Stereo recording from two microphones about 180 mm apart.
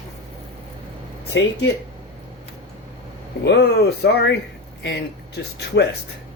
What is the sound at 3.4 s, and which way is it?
Speech, 70° left (ahead or behind).